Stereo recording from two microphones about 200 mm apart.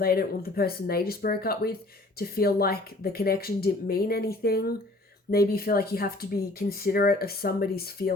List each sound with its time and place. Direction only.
0.0 s speech: 50° left (ahead or behind)